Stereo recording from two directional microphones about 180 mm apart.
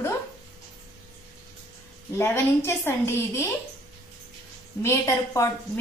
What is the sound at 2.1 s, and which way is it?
A woman's voice, 15° left (ahead or behind).